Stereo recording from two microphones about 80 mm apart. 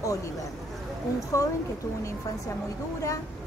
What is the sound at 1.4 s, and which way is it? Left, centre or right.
Speech, left.